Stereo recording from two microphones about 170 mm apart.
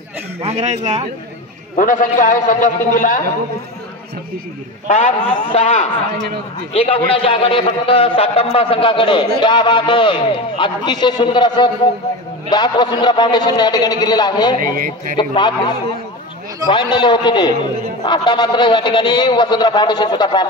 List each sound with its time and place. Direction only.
0.4 s a man's voice: 40° right (ahead or behind)
1.8 s a man's voice: 50° left (ahead or behind)
4.8 s a man's voice: 40° left (ahead or behind)
16.6 s a man's voice: 25° left (ahead or behind)